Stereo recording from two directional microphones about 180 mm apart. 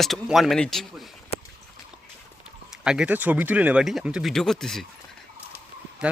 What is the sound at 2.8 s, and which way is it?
Speech, 5° right (ahead or behind).